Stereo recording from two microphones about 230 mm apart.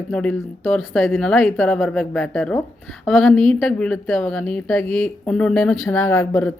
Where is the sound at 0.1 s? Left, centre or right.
Centre.